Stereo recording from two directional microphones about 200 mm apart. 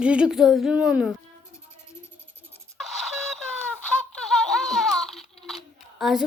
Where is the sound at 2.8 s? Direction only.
Centre (ahead or behind).